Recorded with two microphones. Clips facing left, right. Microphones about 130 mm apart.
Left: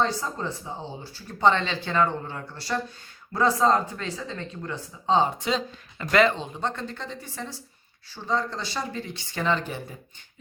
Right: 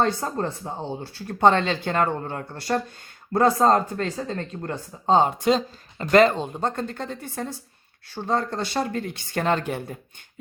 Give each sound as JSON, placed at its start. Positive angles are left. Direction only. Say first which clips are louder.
{"t": 0.0, "sound": "speech", "louder": "right 3 dB", "side_deg": -55}